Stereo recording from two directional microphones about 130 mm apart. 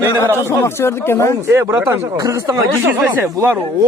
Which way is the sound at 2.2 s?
30° right (ahead or behind).